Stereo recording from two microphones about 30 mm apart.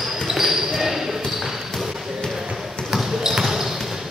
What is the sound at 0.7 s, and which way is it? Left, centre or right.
Basketball bounce, centre.